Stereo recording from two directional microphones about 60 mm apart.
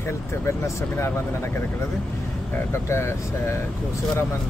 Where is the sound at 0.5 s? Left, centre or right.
Left.